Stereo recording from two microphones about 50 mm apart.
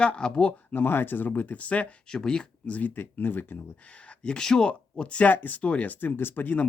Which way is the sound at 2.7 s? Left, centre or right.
Left.